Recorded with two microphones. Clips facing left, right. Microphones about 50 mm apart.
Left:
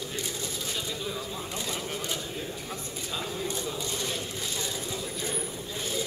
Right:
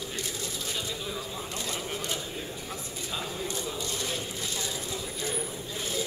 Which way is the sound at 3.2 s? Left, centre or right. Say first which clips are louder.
Left 2 dB; centre.